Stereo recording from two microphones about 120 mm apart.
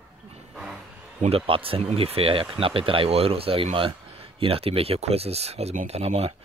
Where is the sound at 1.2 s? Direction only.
50° right (ahead or behind).